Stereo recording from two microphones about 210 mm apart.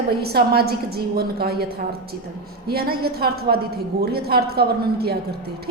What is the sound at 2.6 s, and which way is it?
A woman's voice, 45° right (ahead or behind).